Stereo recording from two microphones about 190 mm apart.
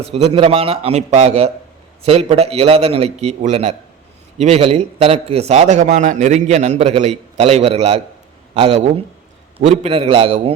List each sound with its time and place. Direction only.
0.0 s a man's voice: 30° right (ahead or behind)